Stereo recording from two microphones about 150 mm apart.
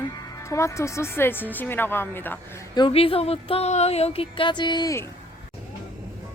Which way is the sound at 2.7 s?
35° left (ahead or behind).